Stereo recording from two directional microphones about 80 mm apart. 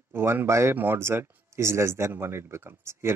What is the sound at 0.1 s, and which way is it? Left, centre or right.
Speech, right.